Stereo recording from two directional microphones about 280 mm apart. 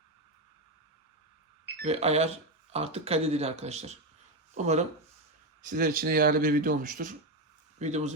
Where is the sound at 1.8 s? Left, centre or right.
Right.